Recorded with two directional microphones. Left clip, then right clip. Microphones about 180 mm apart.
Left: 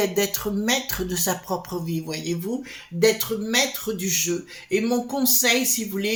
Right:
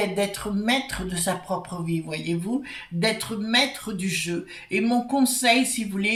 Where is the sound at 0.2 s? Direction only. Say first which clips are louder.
Left 2 dB; 50° left (ahead or behind).